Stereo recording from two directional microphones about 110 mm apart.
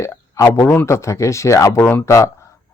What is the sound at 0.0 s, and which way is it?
Speech, 30° left (ahead or behind).